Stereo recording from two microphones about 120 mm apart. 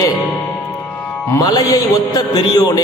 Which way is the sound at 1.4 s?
30° left (ahead or behind).